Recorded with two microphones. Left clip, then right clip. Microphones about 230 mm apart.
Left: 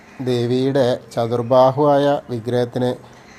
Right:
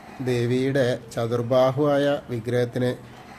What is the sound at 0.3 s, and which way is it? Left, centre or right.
Speech, centre.